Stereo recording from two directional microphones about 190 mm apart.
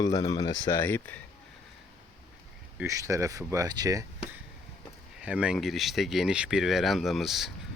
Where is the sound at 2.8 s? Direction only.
15° right (ahead or behind).